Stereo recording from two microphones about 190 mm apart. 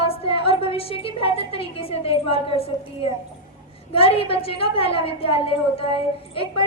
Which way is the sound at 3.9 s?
30° left (ahead or behind).